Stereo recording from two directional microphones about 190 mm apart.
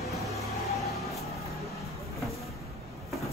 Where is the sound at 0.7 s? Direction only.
Centre (ahead or behind).